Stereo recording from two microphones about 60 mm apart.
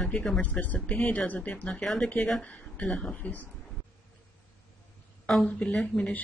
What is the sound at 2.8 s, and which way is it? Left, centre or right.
Speech, centre.